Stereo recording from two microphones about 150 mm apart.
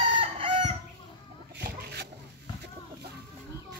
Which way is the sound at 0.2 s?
35° right (ahead or behind).